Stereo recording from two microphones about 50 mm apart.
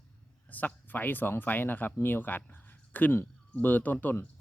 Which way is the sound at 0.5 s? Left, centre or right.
Left.